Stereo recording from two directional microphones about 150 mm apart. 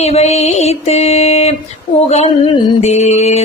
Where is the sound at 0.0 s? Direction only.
45° left (ahead or behind).